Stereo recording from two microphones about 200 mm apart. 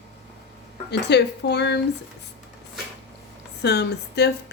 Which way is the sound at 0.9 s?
55° left (ahead or behind).